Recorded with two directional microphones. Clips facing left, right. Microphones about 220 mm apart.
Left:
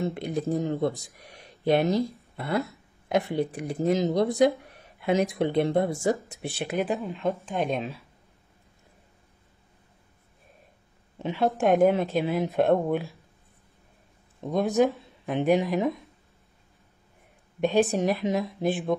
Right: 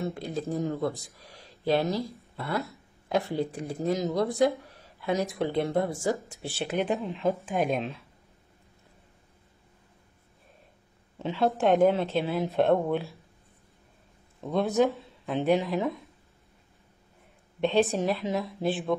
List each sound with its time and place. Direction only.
0.0 s speech: 20° left (ahead or behind)
6.8 s speech: centre (ahead or behind)
11.1 s speech: 15° left (ahead or behind)
14.4 s speech: 15° left (ahead or behind)
17.6 s speech: 10° left (ahead or behind)